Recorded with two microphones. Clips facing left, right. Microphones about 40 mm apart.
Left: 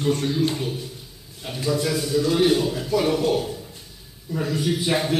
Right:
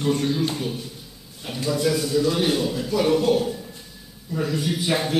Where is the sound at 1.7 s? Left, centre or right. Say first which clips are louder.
Right 1 dB; centre.